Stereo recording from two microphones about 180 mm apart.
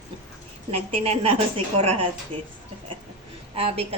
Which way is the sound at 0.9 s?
30° right (ahead or behind).